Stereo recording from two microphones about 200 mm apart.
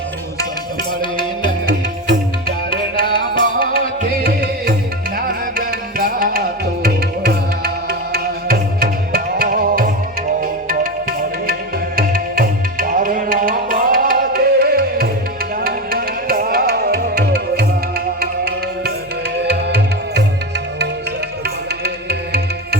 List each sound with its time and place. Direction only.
1.1 s music: 25° left (ahead or behind)
2.6 s music: 25° left (ahead or behind)
4.2 s music: 50° right (ahead or behind)
11.9 s music: 45° right (ahead or behind)